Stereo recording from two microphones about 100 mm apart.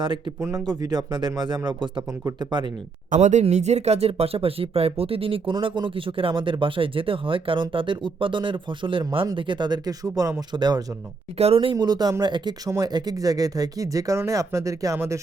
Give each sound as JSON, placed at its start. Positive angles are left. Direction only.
{"t": 0.0, "sound": "speech", "side_deg": -50}
{"t": 3.2, "sound": "speech", "side_deg": -90}
{"t": 10.5, "sound": "speech", "side_deg": -45}
{"t": 11.3, "sound": "speech", "side_deg": -80}
{"t": 11.8, "sound": "speech", "side_deg": -40}